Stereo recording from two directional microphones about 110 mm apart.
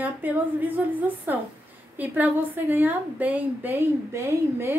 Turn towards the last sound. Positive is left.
turn(degrees=-20)  # may be behind; listen again after turning